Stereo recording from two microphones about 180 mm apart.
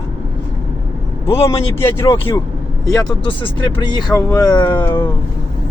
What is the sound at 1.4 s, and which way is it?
Speech, 15° left (ahead or behind).